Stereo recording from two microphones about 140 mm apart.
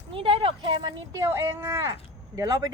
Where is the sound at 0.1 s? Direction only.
40° right (ahead or behind).